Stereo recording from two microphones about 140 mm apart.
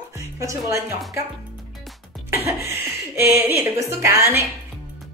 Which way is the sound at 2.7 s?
15° right (ahead or behind).